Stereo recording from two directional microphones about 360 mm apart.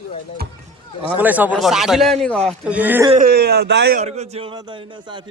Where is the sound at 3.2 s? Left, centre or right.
Right.